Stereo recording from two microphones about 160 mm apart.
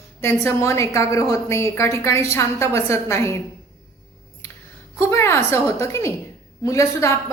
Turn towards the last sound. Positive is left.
turn(degrees=20)  # may be behind; listen again after turning